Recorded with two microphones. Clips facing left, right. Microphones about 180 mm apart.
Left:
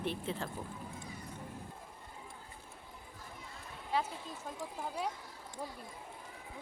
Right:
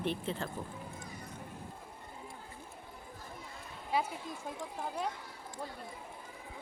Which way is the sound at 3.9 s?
10° right (ahead or behind).